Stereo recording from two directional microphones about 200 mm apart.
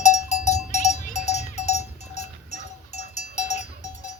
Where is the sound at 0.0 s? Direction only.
35° left (ahead or behind).